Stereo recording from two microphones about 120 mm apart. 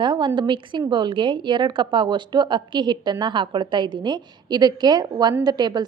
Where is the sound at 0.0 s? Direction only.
40° right (ahead or behind).